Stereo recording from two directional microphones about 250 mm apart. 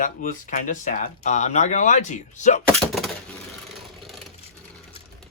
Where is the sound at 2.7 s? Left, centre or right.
Centre.